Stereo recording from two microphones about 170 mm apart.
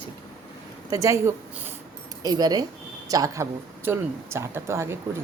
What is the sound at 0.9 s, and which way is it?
A woman's voice, 20° right (ahead or behind).